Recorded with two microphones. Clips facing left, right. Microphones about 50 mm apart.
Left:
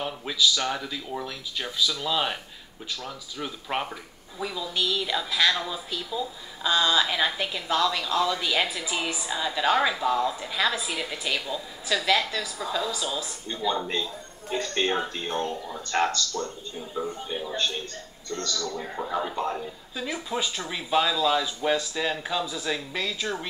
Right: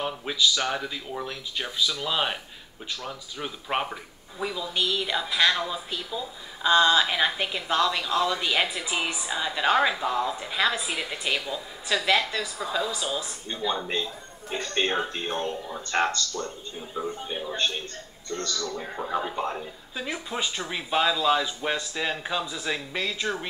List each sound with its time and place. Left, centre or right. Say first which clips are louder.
0.0 s a woman's voice: even; centre
17.3 s a woman's voice: even; centre
18.3 s speech: even; right
18.8 s a woman's voice: right 1 dB; centre